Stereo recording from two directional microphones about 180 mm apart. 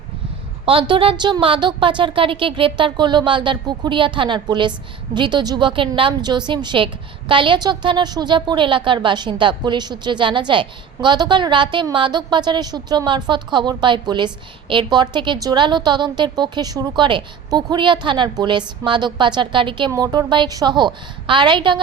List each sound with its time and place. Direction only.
0.6 s a woman's voice: 30° right (ahead or behind)